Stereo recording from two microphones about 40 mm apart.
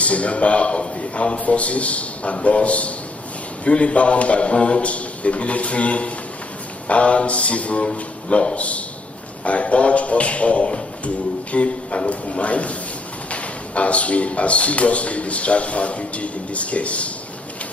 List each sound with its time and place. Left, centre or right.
0.0 s speech: left